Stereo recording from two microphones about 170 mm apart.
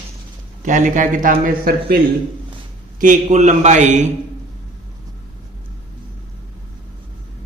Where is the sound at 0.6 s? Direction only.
50° right (ahead or behind).